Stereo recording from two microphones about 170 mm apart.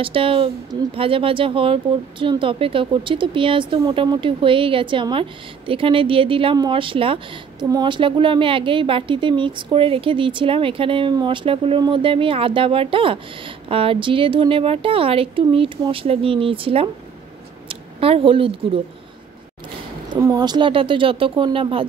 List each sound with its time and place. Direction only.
0.0 s speech: 30° right (ahead or behind)
20.2 s speech: 20° right (ahead or behind)